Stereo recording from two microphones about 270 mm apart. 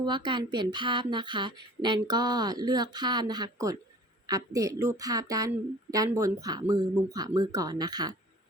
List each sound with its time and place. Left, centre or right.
0.0 s speech: centre